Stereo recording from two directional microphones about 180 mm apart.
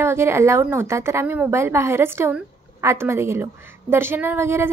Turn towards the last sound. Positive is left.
turn(degrees=-15)  # may be behind; listen again after turning